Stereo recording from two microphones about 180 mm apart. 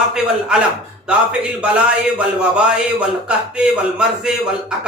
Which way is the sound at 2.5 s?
5° right (ahead or behind).